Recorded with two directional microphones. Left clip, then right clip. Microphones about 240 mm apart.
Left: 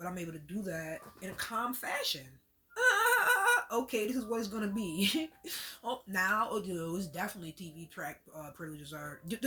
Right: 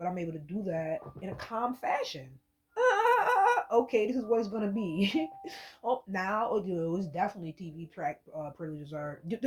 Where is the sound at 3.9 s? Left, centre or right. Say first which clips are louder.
Right 6 dB; centre.